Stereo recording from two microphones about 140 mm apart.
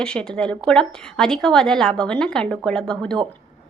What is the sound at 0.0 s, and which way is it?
A woman's voice, 5° left (ahead or behind).